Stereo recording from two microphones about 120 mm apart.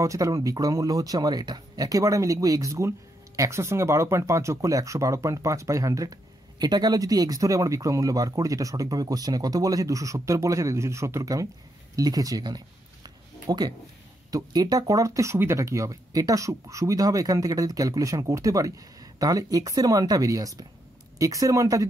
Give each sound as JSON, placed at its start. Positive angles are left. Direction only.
{"t": 0.0, "sound": "speech", "side_deg": -30}